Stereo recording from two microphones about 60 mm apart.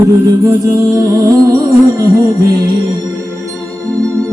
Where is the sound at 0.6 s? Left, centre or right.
Right.